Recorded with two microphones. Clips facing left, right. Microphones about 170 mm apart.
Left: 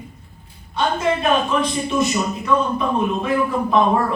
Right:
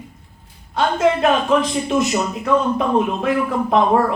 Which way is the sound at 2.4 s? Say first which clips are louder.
Right 2 dB; 80° right.